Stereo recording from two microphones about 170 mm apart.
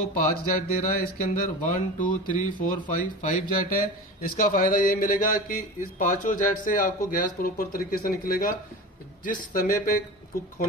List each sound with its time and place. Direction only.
0.1 s speech: 55° left (ahead or behind)
3.5 s a man's voice: 55° left (ahead or behind)